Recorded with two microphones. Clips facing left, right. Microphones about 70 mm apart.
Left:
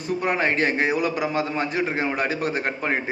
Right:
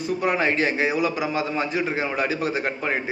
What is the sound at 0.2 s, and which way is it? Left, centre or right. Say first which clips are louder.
A man's voice: even; left.